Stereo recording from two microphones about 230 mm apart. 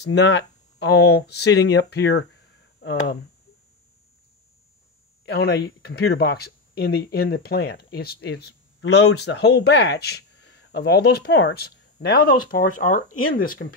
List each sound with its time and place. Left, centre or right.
0.0 s speech: left
5.2 s speech: left